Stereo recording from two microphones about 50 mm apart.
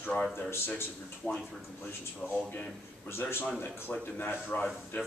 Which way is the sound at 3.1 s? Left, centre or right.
Left.